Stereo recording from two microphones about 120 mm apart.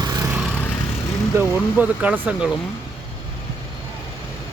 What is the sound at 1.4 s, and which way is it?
Speech, 10° right (ahead or behind).